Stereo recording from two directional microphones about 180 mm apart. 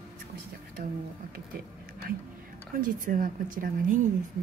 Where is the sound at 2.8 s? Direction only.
50° right (ahead or behind).